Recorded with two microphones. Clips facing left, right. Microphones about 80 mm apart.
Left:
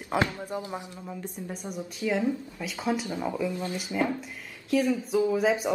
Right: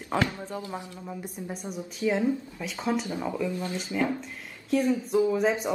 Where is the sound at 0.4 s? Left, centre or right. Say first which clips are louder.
Left 1 dB; centre.